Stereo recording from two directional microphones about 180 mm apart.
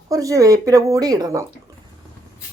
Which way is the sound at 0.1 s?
20° right (ahead or behind).